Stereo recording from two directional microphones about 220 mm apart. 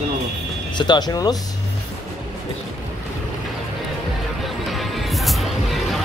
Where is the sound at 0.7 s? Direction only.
20° left (ahead or behind).